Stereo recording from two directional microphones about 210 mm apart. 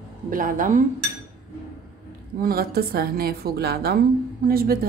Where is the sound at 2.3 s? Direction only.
45° right (ahead or behind).